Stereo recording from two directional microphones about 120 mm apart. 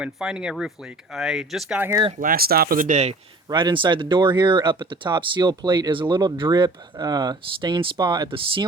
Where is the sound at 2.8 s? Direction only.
75° right (ahead or behind).